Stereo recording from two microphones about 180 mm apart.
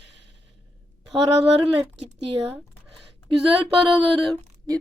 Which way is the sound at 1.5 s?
35° right (ahead or behind).